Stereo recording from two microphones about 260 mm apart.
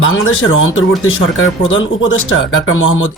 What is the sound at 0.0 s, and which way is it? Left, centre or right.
Speech, left.